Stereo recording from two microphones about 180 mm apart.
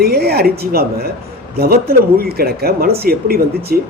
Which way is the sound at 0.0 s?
60° right (ahead or behind).